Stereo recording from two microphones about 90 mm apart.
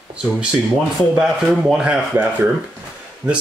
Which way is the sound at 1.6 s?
10° right (ahead or behind).